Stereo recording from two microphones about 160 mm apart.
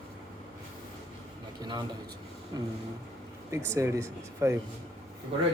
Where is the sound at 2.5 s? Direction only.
25° right (ahead or behind).